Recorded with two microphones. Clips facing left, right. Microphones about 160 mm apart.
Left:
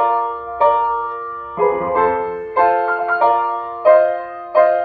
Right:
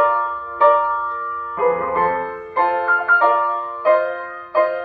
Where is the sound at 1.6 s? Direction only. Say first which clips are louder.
Left 1 dB; 40° left (ahead or behind).